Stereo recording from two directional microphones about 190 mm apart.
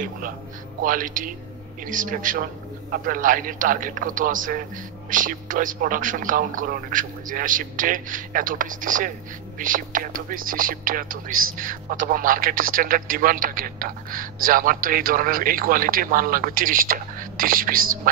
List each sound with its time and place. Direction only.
0.8 s a man's voice: 45° right (ahead or behind)